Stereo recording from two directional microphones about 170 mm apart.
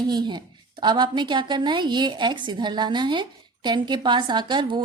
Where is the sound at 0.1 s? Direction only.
25° right (ahead or behind).